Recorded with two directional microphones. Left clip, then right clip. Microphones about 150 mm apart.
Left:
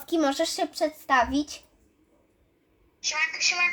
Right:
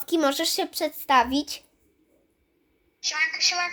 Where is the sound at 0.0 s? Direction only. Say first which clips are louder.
Right 1 dB; 40° right (ahead or behind); by 1.6 s 55° right (ahead or behind).